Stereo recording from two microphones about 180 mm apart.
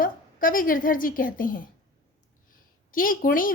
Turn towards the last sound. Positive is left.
turn(degrees=50)  # may be behind; listen again after turning